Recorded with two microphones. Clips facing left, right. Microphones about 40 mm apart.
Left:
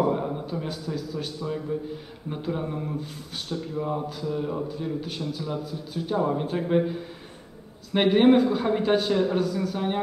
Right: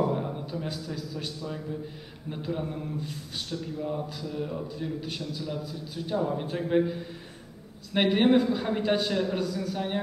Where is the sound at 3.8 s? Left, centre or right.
Centre.